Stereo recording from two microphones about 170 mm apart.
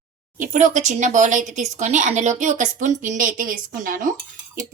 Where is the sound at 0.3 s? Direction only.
50° right (ahead or behind).